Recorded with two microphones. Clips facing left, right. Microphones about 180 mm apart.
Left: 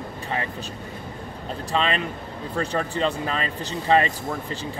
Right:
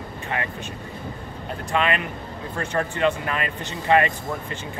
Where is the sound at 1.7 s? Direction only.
30° left (ahead or behind).